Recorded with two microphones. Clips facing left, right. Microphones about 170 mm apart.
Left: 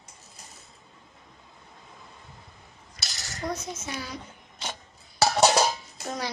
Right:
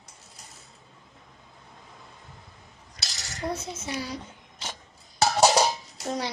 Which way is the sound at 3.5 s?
30° right (ahead or behind).